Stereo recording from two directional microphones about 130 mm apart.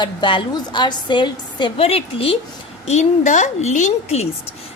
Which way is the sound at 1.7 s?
50° left (ahead or behind).